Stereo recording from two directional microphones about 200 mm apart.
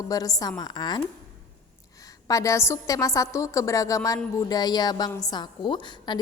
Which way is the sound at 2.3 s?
15° left (ahead or behind).